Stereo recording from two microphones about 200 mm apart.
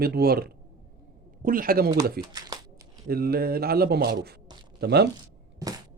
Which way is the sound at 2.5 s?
15° right (ahead or behind).